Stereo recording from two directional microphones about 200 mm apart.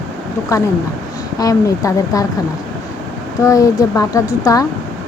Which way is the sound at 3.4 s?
15° left (ahead or behind).